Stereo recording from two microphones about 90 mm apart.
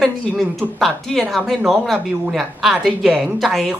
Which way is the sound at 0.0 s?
Centre (ahead or behind).